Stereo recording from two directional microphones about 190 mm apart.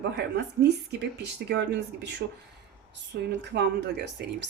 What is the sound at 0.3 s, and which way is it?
Speech, 65° right (ahead or behind).